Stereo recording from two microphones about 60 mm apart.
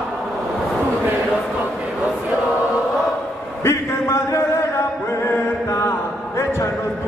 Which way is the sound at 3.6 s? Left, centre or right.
Left.